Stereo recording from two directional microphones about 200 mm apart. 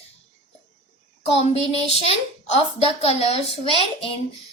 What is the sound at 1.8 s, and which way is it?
A child's voice, 30° left (ahead or behind).